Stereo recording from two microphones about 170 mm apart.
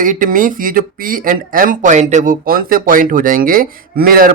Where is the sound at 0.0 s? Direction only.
50° right (ahead or behind).